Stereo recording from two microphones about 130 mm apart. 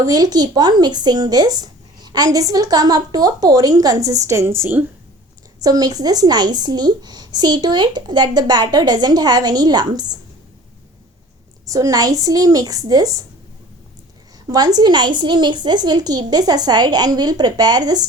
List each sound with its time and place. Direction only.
0.0 s speech: 30° right (ahead or behind)
5.5 s speech: 30° right (ahead or behind)
11.7 s speech: 25° right (ahead or behind)
14.4 s speech: 30° right (ahead or behind)